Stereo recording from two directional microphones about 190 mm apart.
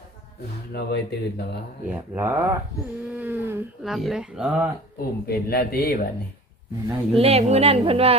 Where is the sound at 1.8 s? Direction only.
10° right (ahead or behind).